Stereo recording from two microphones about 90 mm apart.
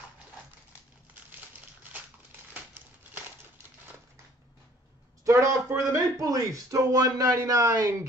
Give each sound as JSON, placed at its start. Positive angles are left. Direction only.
{"t": 5.2, "sound": "speech", "side_deg": -35}